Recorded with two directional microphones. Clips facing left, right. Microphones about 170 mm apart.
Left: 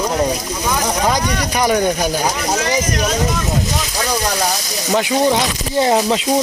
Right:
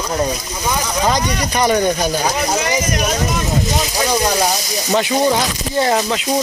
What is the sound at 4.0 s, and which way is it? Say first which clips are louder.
Speech: right 3 dB; 10° right (ahead or behind).